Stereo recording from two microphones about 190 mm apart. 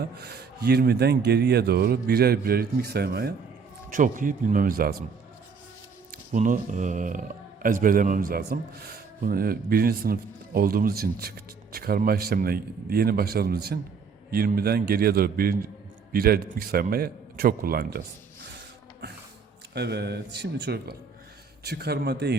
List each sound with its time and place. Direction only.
0.2 s speech: 55° right (ahead or behind)
3.9 s speech: 45° right (ahead or behind)
6.3 s speech: 40° right (ahead or behind)
19.7 s speech: 60° right (ahead or behind)